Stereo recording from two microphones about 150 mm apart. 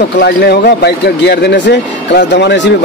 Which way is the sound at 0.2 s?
90° left.